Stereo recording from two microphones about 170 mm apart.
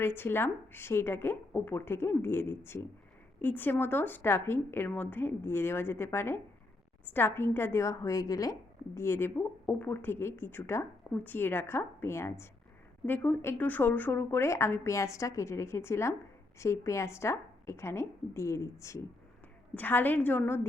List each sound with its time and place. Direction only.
0.0 s speech: 15° left (ahead or behind)